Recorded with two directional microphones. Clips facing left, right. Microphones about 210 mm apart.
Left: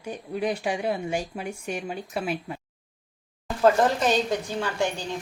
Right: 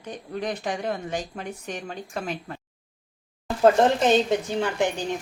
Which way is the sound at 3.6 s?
25° right (ahead or behind).